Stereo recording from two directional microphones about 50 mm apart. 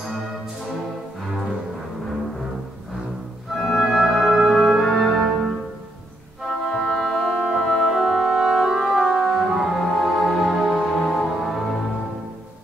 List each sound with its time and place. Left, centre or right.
3.6 s music: centre
6.7 s music: centre
7.0 s music: centre
8.9 s music: centre
9.8 s music: centre